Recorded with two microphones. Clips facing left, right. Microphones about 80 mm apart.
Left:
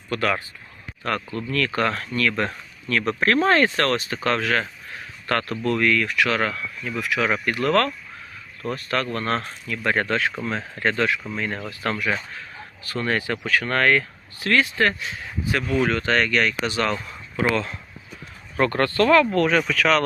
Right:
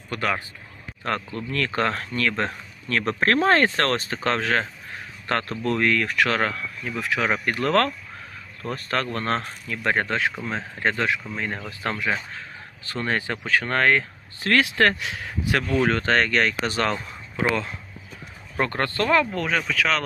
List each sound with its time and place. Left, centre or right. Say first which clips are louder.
0.1 s speech: left 2 dB; right
2.9 s speech: left 1 dB; right
14.6 s speech: right 1 dB; right
15.9 s speech: even; right
17.1 s speech: left 2 dB; centre
19.4 s speech: left 5 dB; centre